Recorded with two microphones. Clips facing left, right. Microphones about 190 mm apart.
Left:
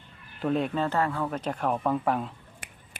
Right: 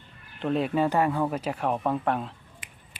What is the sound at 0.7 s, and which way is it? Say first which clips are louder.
Speech: right 3 dB; 15° right (ahead or behind).